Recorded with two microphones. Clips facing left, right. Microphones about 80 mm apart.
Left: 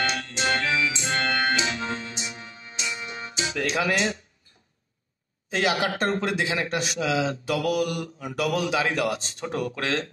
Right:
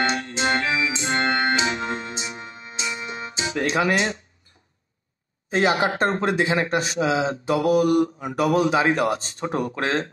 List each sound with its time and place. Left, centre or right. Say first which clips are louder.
0.0 s organ: right 4 dB; right
3.3 s music: right 3 dB; right
3.9 s speech: right 2 dB; right
5.5 s speech: right 4 dB; right